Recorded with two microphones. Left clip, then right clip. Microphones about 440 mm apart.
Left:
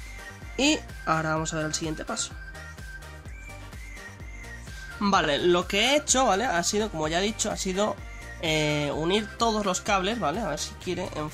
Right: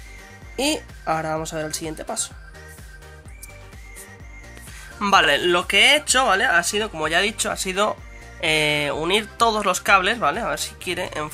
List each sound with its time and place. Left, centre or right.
0.6 s speech: right
5.0 s speech: right